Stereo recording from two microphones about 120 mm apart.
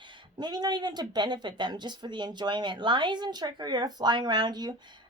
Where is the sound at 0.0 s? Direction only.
40° right (ahead or behind).